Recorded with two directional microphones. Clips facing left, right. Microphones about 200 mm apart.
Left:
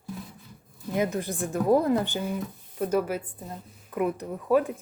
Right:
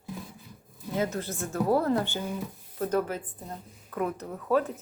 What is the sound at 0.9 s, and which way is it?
Speech, 15° left (ahead or behind).